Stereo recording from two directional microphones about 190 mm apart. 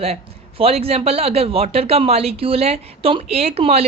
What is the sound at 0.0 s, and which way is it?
A man's voice, 30° right (ahead or behind).